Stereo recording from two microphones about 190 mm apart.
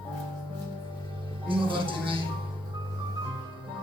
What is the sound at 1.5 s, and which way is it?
Speech, 25° right (ahead or behind).